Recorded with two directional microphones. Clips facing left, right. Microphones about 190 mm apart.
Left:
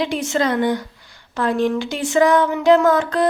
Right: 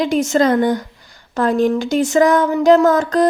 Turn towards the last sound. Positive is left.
turn(degrees=-40)  # may be behind; listen again after turning